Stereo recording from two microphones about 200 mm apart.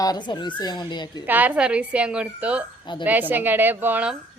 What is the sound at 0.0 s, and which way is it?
Speech, 20° left (ahead or behind).